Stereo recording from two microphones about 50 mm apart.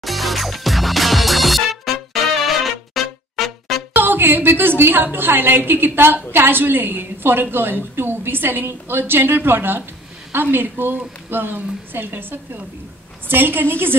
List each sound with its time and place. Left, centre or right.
0.0 s music: centre
3.9 s a woman's voice: right